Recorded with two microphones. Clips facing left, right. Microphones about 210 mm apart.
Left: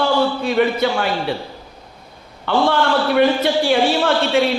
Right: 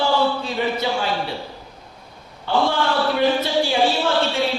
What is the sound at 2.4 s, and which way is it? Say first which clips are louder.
A woman's voice: left 3 dB; 65° left (ahead or behind).